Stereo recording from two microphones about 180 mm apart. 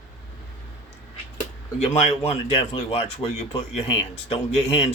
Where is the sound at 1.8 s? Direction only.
35° left (ahead or behind).